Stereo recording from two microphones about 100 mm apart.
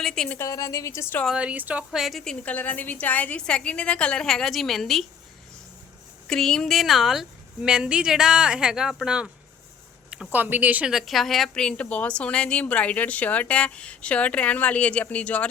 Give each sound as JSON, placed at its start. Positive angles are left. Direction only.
{"t": 0.0, "sound": "a woman's voice", "side_deg": 5}
{"t": 0.4, "sound": "a woman's voice", "side_deg": 35}
{"t": 1.3, "sound": "speech", "side_deg": -10}
{"t": 1.9, "sound": "a woman's voice", "side_deg": 0}
{"t": 6.2, "sound": "speech", "side_deg": 5}
{"t": 10.1, "sound": "a sound", "side_deg": -10}
{"t": 10.4, "sound": "speech", "side_deg": -15}
{"t": 10.9, "sound": "a woman's voice", "side_deg": 0}